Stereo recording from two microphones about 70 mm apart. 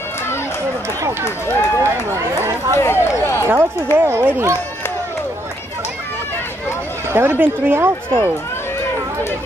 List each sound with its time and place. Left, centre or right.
1.8 s speech: right
2.8 s speech: left
3.4 s speech: right
7.1 s speech: right